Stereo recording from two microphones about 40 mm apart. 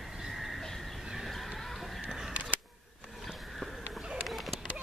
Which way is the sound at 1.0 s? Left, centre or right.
Centre.